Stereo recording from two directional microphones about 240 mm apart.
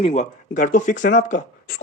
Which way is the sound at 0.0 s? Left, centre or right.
Left.